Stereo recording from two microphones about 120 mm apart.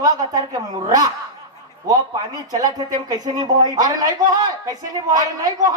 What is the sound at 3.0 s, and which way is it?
Speech, 35° right (ahead or behind).